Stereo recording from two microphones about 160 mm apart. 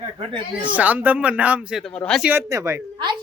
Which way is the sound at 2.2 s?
15° right (ahead or behind).